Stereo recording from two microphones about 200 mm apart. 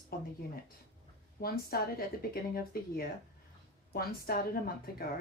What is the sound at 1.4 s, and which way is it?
Speech, 50° left (ahead or behind).